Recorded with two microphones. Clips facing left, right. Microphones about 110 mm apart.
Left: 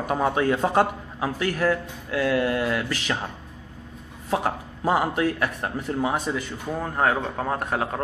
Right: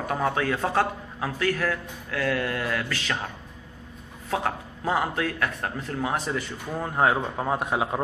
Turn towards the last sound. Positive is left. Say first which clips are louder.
# even
turn(degrees=-10)  # may be behind; listen again after turning